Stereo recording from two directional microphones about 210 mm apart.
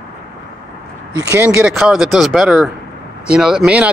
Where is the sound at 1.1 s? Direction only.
10° right (ahead or behind).